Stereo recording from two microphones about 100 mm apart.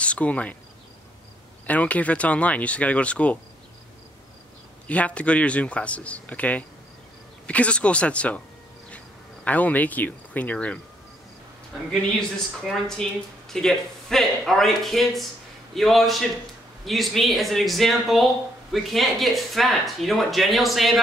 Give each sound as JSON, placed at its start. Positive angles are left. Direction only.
{"t": 0.0, "sound": "speech", "side_deg": 10}
{"t": 1.7, "sound": "speech", "side_deg": 15}
{"t": 4.8, "sound": "speech", "side_deg": 15}
{"t": 11.9, "sound": "speech", "side_deg": 5}